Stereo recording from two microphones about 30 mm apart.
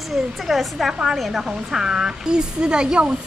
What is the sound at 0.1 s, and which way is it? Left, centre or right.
A woman's voice, centre.